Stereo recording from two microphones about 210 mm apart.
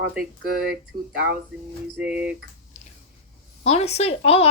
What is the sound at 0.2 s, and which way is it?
Speech, 45° right (ahead or behind).